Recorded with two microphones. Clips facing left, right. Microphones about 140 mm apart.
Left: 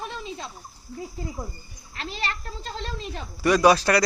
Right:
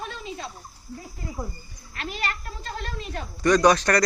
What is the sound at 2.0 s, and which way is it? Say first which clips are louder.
Speech: right 1 dB; 30° left (ahead or behind).